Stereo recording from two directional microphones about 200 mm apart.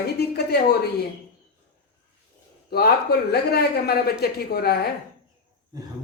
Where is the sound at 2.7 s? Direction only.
50° left (ahead or behind).